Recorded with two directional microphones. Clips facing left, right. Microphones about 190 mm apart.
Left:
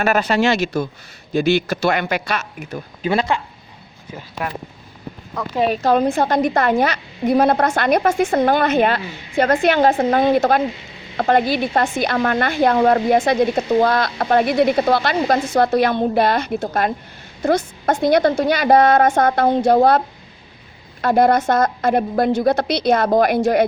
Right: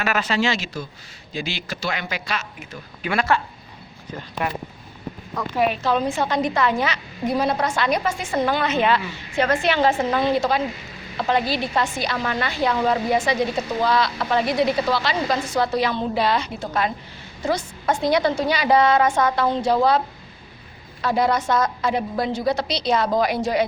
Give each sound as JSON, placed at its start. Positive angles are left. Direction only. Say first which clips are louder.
{"t": 0.0, "sound": "a woman's voice", "louder": "left 5 dB", "side_deg": 55}
{"t": 3.0, "sound": "a woman's voice", "louder": "left 2 dB", "side_deg": 25}
{"t": 4.1, "sound": "speech", "louder": "even", "side_deg": 0}
{"t": 5.5, "sound": "a woman's voice", "louder": "left 5 dB", "side_deg": 40}
{"t": 9.9, "sound": "a woman's voice", "louder": "left 5 dB", "side_deg": 35}
{"t": 10.2, "sound": "a woman's voice", "louder": "left 5 dB", "side_deg": 50}
{"t": 21.0, "sound": "a woman's voice", "louder": "left 6 dB", "side_deg": 50}